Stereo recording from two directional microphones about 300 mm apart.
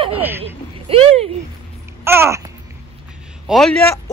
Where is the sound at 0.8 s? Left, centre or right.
Centre.